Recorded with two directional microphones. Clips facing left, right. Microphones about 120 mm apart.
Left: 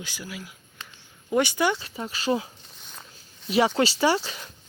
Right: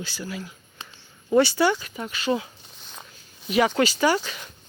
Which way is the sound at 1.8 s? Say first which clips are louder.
Even; 30° left (ahead or behind).